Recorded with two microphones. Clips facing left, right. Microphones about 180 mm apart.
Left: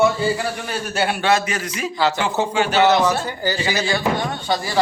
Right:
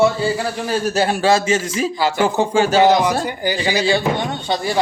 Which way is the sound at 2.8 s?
15° right (ahead or behind).